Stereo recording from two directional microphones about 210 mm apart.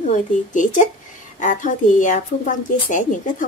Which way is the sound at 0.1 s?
35° left (ahead or behind).